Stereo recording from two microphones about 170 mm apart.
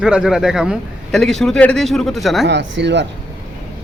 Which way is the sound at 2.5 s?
90° right.